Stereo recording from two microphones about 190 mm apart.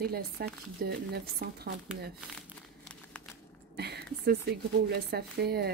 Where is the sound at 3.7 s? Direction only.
60° right (ahead or behind).